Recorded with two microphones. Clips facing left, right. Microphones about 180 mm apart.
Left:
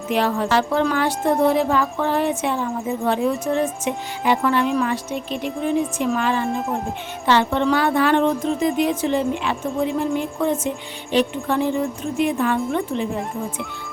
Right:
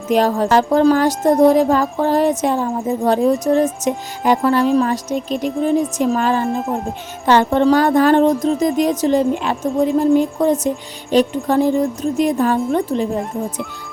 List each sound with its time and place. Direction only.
0.1 s speech: 40° right (ahead or behind)
6.5 s speech: centre (ahead or behind)
7.3 s speech: 45° right (ahead or behind)